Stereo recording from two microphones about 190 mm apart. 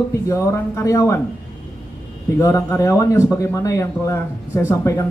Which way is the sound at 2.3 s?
15° left (ahead or behind).